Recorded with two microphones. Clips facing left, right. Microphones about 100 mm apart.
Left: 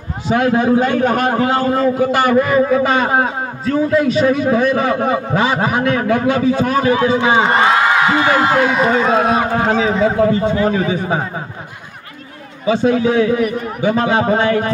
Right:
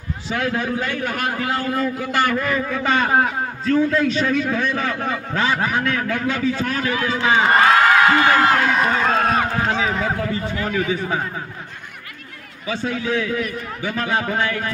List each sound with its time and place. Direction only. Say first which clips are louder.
0.3 s a man's voice: left 9 dB; 30° left (ahead or behind)
3.6 s a man's voice: left 3 dB; 15° left (ahead or behind)
7.7 s a man's voice: left 1 dB; 15° left (ahead or behind)
9.7 s a man's voice: left 7 dB; 35° left (ahead or behind)
12.6 s a man's voice: left 10 dB; 20° left (ahead or behind)